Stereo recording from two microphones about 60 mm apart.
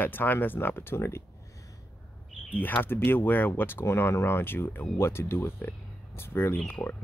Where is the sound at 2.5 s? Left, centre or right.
Left.